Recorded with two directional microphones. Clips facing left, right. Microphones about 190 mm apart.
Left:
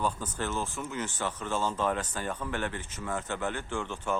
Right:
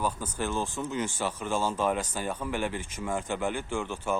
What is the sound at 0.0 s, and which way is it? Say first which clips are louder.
Speech: right 1 dB; 10° right (ahead or behind).